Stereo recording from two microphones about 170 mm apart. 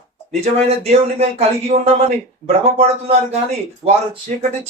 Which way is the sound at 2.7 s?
35° right (ahead or behind).